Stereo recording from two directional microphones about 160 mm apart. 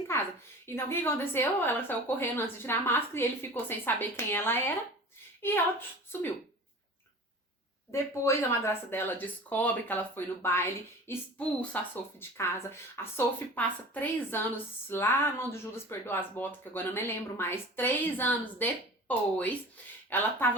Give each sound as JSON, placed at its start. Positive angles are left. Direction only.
{"t": 0.1, "sound": "a sound", "side_deg": 15}
{"t": 0.8, "sound": "a woman's voice", "side_deg": 15}
{"t": 7.9, "sound": "a woman's voice", "side_deg": 15}